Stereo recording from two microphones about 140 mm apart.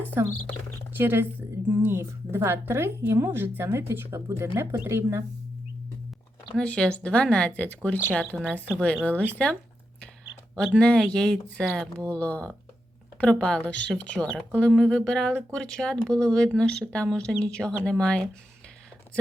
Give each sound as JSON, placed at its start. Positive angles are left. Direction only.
{"t": 0.0, "sound": "a woman's voice", "side_deg": -15}
{"t": 6.6, "sound": "speech", "side_deg": 5}
{"t": 10.8, "sound": "speech", "side_deg": 5}